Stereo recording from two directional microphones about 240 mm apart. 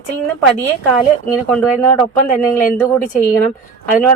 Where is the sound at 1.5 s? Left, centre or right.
Centre.